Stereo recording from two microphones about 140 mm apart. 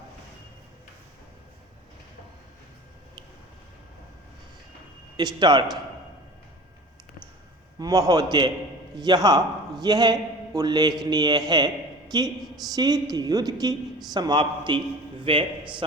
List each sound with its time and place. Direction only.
5.1 s a man's voice: 30° right (ahead or behind)
7.8 s a woman's voice: 25° right (ahead or behind)